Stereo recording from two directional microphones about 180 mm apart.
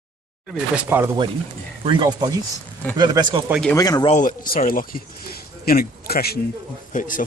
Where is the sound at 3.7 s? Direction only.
20° left (ahead or behind).